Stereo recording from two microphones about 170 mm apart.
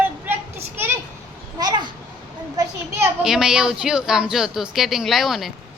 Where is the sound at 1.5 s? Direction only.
25° right (ahead or behind).